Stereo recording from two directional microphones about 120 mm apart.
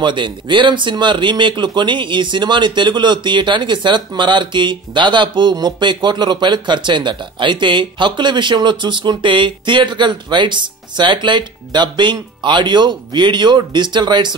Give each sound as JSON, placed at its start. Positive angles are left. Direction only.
{"t": 0.0, "sound": "speech", "side_deg": -40}